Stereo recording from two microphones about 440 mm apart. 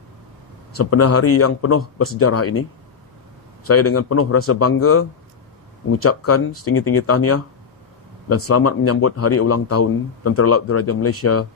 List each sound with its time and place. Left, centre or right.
0.7 s speech: left
3.6 s speech: left